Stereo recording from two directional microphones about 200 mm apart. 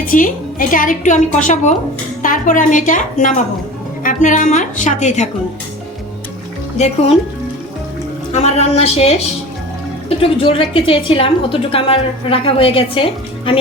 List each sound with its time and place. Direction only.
0.1 s a woman's voice: 40° left (ahead or behind)
6.7 s a woman's voice: 30° left (ahead or behind)
8.3 s a woman's voice: 35° left (ahead or behind)
10.2 s a woman's voice: 25° left (ahead or behind)